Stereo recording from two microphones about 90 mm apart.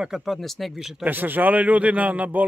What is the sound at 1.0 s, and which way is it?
Speech, 20° right (ahead or behind).